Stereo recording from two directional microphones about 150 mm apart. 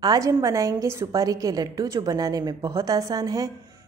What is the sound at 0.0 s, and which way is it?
A woman's voice, 25° right (ahead or behind).